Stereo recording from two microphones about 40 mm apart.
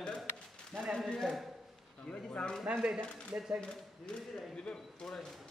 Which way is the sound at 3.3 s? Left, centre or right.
Centre.